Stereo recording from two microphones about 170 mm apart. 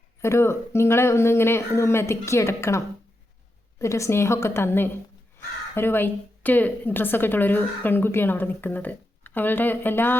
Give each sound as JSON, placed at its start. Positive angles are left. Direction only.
{"t": 0.2, "sound": "a woman's voice", "side_deg": 15}